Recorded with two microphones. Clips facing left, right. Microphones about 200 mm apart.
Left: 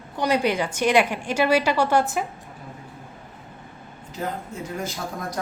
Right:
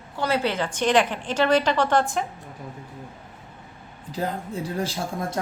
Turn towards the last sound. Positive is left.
turn(degrees=-25)  # may be behind; listen again after turning